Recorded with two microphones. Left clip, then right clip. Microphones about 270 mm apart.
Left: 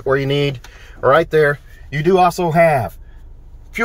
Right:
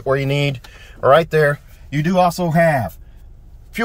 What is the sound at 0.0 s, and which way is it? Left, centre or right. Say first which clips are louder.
Speech: left 2 dB; centre.